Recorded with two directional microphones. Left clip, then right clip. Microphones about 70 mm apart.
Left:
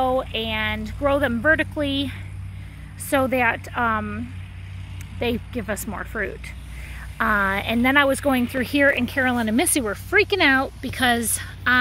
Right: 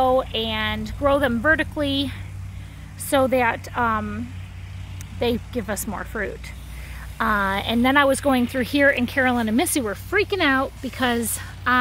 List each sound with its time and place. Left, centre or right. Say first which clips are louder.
0.0 s speech: right 2 dB; right
3.3 s speech: right 1 dB; centre
5.2 s speech: right 2 dB; right
5.9 s speech: even; centre
7.5 s speech: even; right
8.5 s speech: left 1 dB; centre
9.3 s speech: even; centre
10.1 s speech: left 3 dB; centre
10.9 s speech: left 5 dB; centre
11.1 s speech: even; centre